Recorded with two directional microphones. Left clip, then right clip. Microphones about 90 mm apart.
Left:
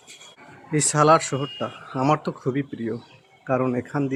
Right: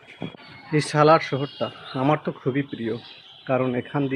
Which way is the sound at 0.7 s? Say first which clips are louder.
Even; 15° left (ahead or behind).